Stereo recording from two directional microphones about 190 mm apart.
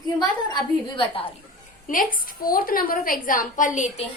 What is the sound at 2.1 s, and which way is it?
A woman's voice, 50° left (ahead or behind).